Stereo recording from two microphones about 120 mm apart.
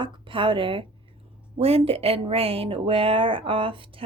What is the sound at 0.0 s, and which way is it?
A woman's voice, 45° right (ahead or behind).